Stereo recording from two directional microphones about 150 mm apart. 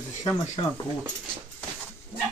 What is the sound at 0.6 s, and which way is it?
Speech, 40° left (ahead or behind).